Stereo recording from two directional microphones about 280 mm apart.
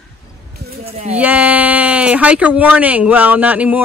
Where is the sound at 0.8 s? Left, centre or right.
Right.